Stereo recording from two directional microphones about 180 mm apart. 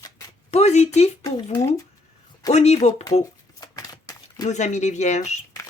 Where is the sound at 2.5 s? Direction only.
35° left (ahead or behind).